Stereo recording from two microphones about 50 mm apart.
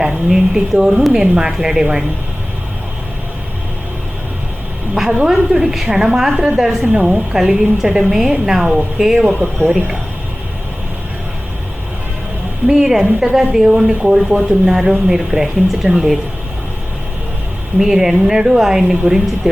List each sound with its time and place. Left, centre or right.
0.0 s a woman's voice: centre
4.9 s a woman's voice: centre
7.3 s a woman's voice: centre
9.4 s speech: right
12.6 s a woman's voice: centre
17.7 s a woman's voice: centre